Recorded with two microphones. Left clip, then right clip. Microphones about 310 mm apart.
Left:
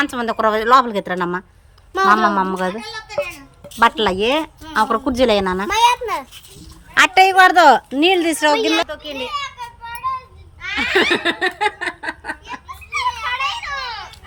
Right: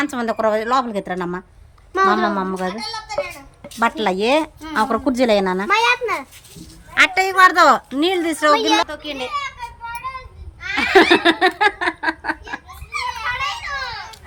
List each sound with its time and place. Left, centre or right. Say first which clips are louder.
0.0 s a woman's voice: left 2 dB; centre
5.6 s a sound: left 3 dB; left
6.9 s a woman's voice: left 4 dB; centre
10.6 s giggle: right 3 dB; centre
12.9 s children playing: left 3 dB; centre